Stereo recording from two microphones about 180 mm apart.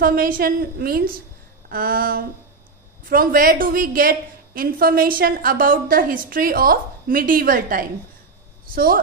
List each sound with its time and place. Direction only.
0.0 s a woman's voice: 55° right (ahead or behind)